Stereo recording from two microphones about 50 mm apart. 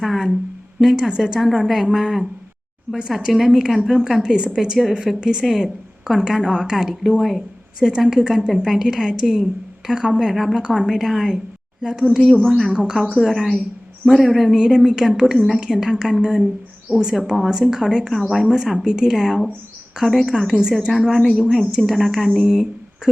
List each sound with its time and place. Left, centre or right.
0.0 s speech: centre
0.8 s a woman's voice: centre
1.4 s a woman's voice: centre
3.3 s a woman's voice: centre
7.8 s a woman's voice: centre
12.7 s a woman's voice: centre
13.1 s a woman's voice: centre
20.9 s speech: centre